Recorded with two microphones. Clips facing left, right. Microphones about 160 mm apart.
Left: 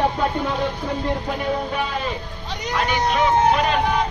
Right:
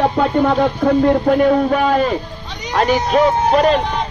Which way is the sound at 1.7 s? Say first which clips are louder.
Right 10 dB; 55° right (ahead or behind).